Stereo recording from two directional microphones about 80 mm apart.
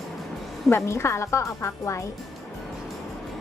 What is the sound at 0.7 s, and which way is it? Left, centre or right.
Speech, left.